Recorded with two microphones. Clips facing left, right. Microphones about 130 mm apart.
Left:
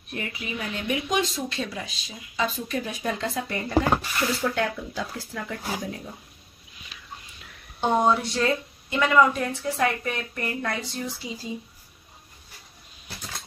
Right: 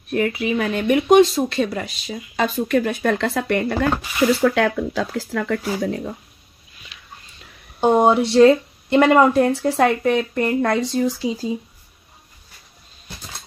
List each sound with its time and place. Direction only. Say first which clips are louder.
0.1 s speech: right 13 dB; 75° right (ahead or behind)
4.4 s speech: right 9 dB; 90° right
7.8 s speech: right 7 dB; 50° right (ahead or behind); by 8.4 s 70° right (ahead or behind)
8.4 s speech: right 13 dB; 55° right (ahead or behind)
9.6 s speech: right 8 dB; 90° right; by 11.1 s 75° right (ahead or behind)